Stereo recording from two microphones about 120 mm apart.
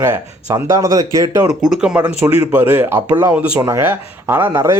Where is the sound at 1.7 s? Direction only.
5° right (ahead or behind).